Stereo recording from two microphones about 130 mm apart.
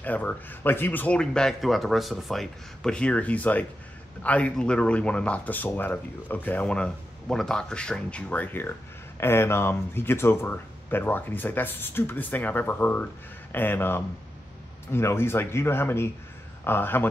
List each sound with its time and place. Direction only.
0.0 s speech: 10° left (ahead or behind)